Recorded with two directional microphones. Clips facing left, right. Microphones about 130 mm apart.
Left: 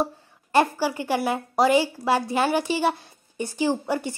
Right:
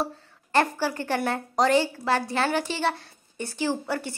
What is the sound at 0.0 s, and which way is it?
A woman's voice, 10° left (ahead or behind).